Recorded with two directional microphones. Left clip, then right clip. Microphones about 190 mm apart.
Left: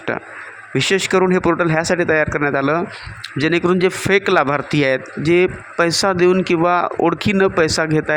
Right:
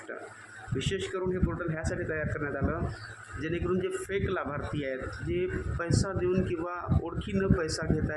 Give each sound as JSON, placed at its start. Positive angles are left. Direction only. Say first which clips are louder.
{"t": 0.8, "sound": "a man's voice", "louder": "left 18 dB", "side_deg": 50}